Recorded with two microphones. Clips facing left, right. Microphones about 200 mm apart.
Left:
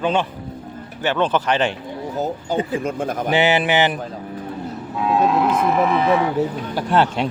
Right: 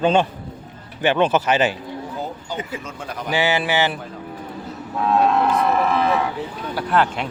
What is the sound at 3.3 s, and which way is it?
Speech, 20° left (ahead or behind).